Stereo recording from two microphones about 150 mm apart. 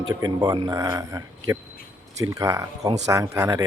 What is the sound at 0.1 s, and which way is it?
Speech, 25° right (ahead or behind).